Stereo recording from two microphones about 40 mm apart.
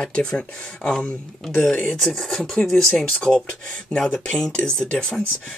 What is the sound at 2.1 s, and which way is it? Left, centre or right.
Speech, centre.